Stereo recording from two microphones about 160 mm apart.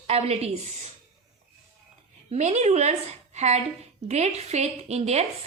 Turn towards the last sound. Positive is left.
turn(degrees=-40)  # may be behind; listen again after turning